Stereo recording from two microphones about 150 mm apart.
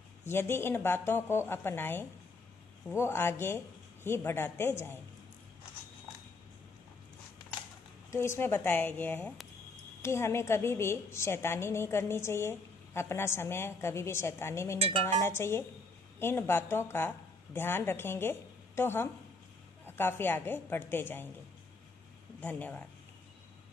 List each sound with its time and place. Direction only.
0.3 s a woman's voice: 15° left (ahead or behind)
8.1 s a woman's voice: 15° left (ahead or behind)
22.4 s a woman's voice: 10° left (ahead or behind)